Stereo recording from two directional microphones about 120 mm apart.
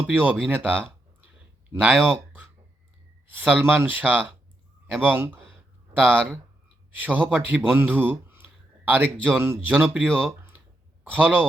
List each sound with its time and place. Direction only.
0.1 s speech: 15° right (ahead or behind)
1.7 s speech: 15° right (ahead or behind)